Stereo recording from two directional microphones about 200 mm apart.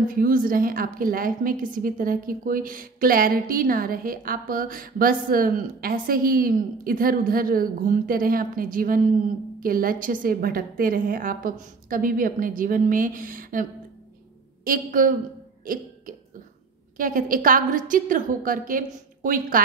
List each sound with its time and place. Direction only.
0.1 s a woman's voice: 45° right (ahead or behind)
15.6 s a sound: 45° right (ahead or behind)
16.9 s a woman's voice: 45° right (ahead or behind)